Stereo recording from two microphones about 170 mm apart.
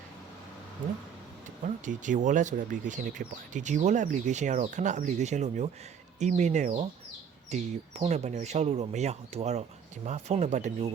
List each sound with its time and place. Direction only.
1.6 s speech: 50° right (ahead or behind)